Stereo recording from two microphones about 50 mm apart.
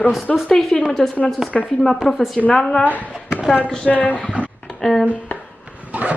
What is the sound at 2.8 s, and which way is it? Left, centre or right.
Speech, left.